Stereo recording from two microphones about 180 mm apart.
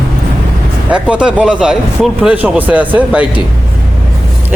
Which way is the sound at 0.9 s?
5° right (ahead or behind).